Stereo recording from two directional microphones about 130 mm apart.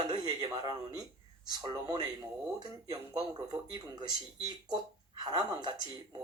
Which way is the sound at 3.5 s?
30° right (ahead or behind).